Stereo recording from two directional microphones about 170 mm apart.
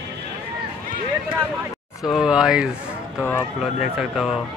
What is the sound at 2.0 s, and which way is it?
Speech, centre (ahead or behind).